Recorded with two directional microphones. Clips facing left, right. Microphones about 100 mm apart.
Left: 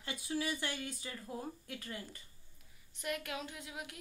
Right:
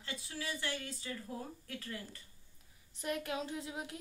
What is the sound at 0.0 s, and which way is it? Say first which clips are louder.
Speech: left 5 dB; 20° left (ahead or behind).